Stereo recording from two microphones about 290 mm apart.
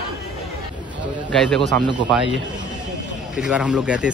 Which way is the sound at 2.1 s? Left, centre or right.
Centre.